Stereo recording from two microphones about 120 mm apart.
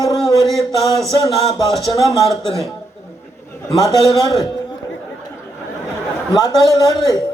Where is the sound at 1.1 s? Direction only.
30° left (ahead or behind).